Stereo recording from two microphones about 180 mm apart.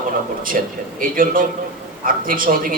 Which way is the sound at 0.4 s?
50° right (ahead or behind).